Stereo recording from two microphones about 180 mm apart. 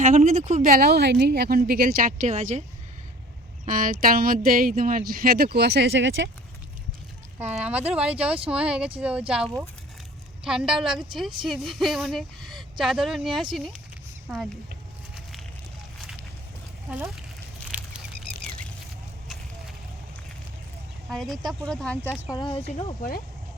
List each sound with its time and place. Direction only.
0.0 s a woman's voice: 45° right (ahead or behind)
3.7 s speech: 50° right (ahead or behind); by 6.3 s 90° right
7.3 s speech: 10° right (ahead or behind)
17.7 s a sound: 10° right (ahead or behind)
21.1 s speech: centre (ahead or behind)
22.3 s speech: 30° left (ahead or behind)